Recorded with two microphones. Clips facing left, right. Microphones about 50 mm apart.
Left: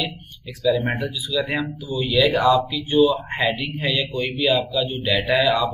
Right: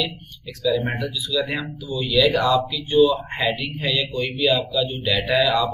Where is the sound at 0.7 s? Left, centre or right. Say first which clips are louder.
Left 1 dB; centre.